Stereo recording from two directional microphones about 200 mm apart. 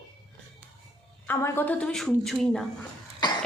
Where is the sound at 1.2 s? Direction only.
10° left (ahead or behind).